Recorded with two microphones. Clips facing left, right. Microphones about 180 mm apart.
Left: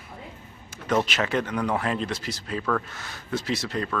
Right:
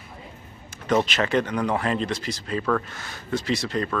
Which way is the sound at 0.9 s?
5° left (ahead or behind).